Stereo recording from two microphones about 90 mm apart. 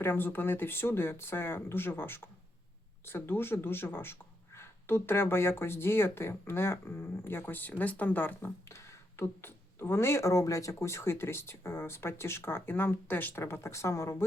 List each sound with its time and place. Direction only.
0.0 s speech: 25° left (ahead or behind)